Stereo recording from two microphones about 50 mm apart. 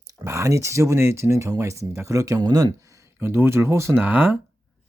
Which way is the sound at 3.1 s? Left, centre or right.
Right.